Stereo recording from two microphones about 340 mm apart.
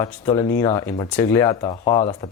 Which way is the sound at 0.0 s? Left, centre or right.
Centre.